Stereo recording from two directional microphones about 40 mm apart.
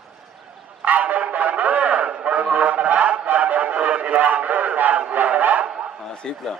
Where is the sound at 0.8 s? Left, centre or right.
Right.